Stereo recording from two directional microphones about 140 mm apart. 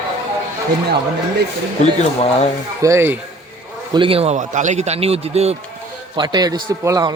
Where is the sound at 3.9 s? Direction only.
40° right (ahead or behind).